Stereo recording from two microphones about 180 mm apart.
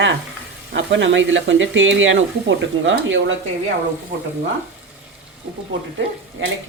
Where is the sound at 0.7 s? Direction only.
80° right.